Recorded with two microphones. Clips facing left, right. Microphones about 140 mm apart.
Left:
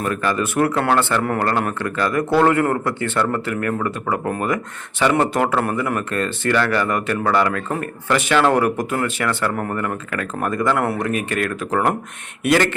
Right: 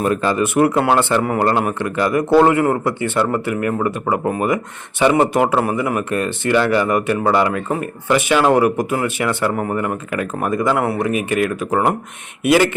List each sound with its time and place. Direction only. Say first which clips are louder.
0.0 s speech: right 4 dB; 25° right (ahead or behind)
1.2 s speech: right 3 dB; 5° right (ahead or behind)